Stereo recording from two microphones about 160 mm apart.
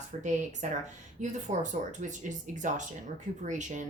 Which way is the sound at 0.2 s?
50° right (ahead or behind).